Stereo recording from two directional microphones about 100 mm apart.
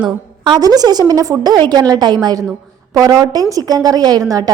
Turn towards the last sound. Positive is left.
turn(degrees=-40)  # may be behind; listen again after turning